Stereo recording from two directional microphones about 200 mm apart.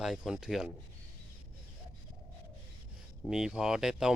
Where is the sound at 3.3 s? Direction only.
5° right (ahead or behind).